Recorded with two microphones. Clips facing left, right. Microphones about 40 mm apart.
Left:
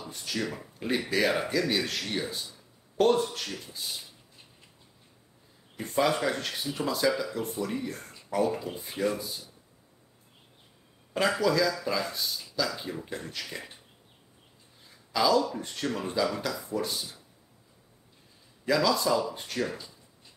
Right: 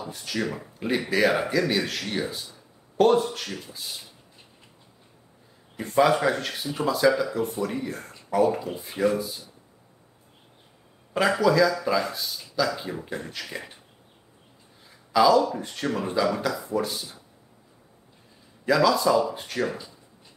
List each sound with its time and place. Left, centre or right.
0.1 s speech: centre
5.9 s speech: centre
11.1 s speech: centre
14.9 s a sound: centre
15.6 s speech: centre
15.9 s speech: centre
18.7 s speech: centre
19.6 s speech: centre